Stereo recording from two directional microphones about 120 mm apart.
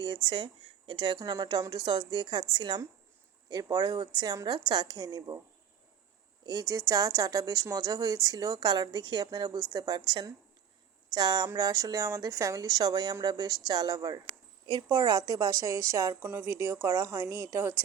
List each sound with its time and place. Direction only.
0.3 s speech: 40° right (ahead or behind)
6.4 s a woman's voice: 35° right (ahead or behind)